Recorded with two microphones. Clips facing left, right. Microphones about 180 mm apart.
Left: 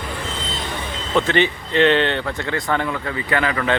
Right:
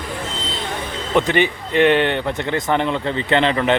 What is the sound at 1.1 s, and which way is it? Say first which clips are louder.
Speech: right 1 dB; 15° right (ahead or behind).